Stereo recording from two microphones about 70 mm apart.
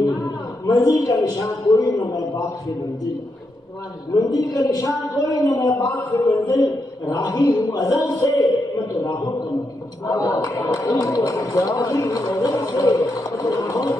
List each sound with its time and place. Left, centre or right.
0.7 s a man's voice: left
4.1 s a man's voice: left
4.6 s a man's voice: left
10.0 s a man's voice: left